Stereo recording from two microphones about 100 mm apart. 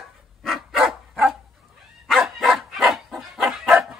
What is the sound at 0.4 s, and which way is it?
Dog, centre (ahead or behind).